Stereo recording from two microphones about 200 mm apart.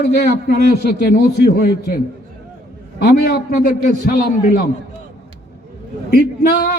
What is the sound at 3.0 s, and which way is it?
Speech, 55° left (ahead or behind).